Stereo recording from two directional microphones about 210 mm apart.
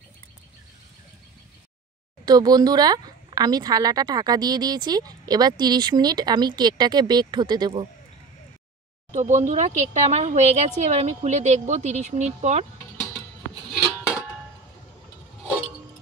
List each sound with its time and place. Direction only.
2.2 s speech: 20° right (ahead or behind)
9.1 s a woman's voice: 35° right (ahead or behind)